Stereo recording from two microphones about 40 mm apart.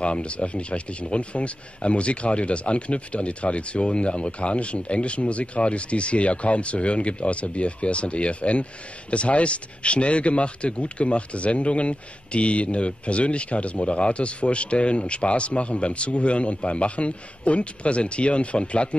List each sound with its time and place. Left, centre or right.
0.0 s speech: left